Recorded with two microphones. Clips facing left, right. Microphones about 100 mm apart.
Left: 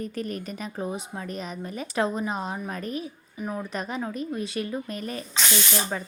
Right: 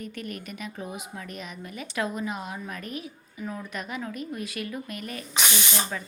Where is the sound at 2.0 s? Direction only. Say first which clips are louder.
Left 4 dB; 30° left (ahead or behind).